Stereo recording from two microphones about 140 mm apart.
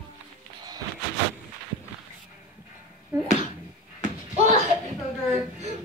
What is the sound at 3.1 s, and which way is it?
Speech, 25° right (ahead or behind).